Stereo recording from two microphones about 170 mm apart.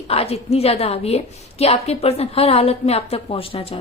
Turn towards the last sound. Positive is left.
turn(degrees=35)  # may be behind; listen again after turning